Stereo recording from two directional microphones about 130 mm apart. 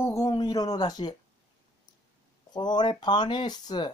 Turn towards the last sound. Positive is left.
turn(degrees=35)  # may be behind; listen again after turning